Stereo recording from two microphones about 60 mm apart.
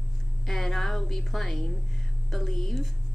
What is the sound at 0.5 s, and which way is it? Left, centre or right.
A woman's voice, centre.